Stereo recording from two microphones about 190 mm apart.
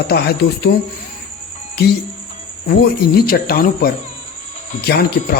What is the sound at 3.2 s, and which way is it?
A man's voice, 50° left (ahead or behind).